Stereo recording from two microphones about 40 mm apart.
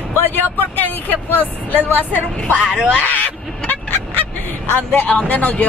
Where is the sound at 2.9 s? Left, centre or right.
Left.